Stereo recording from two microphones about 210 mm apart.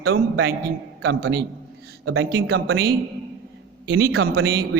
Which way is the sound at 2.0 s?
80° right.